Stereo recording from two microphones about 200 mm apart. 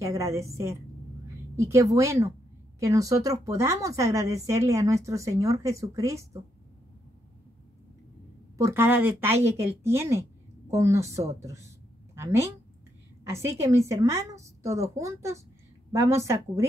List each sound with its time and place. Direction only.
0.0 s a woman's voice: 15° right (ahead or behind)
8.5 s a woman's voice: 15° right (ahead or behind)